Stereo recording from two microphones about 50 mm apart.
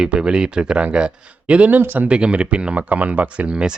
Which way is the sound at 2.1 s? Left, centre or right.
Right.